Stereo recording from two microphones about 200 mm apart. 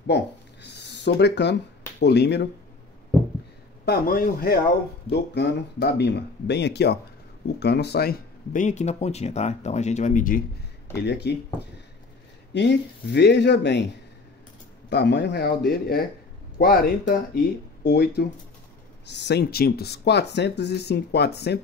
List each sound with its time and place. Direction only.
0.0 s speech: 55° left (ahead or behind)
3.8 s speech: 50° left (ahead or behind)
5.1 s speech: 55° left (ahead or behind); by 10.4 s 40° left (ahead or behind)
11.0 s speech: 55° left (ahead or behind)
12.5 s speech: 60° left (ahead or behind)
14.9 s speech: 55° left (ahead or behind)